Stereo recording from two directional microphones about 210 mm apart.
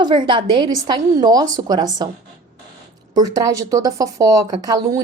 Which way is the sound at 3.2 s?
15° right (ahead or behind).